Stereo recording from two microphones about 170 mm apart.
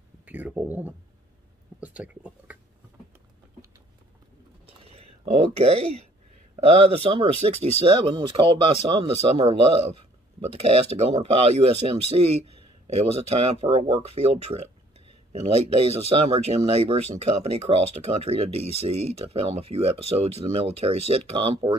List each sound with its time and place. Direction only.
0.2 s speech: 10° right (ahead or behind)
4.6 s a sound: 35° right (ahead or behind)
6.5 s speech: 35° right (ahead or behind)
10.6 s speech: 35° right (ahead or behind)